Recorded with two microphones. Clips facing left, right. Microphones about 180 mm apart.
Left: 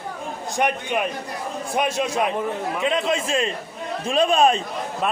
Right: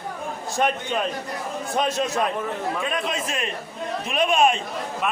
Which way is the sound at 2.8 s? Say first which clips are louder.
Left 5 dB; 25° left (ahead or behind).